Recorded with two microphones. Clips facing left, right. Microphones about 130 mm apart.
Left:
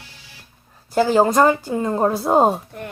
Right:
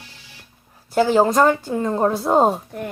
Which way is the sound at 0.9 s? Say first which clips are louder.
Even; centre (ahead or behind).